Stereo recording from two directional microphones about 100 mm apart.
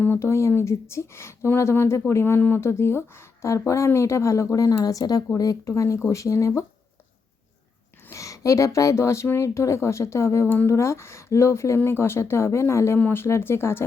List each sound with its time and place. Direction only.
0.0 s a woman's voice: 25° left (ahead or behind)
8.1 s speech: 35° left (ahead or behind)